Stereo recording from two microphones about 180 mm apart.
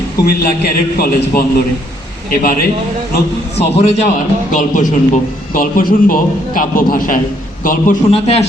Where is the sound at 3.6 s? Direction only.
35° left (ahead or behind).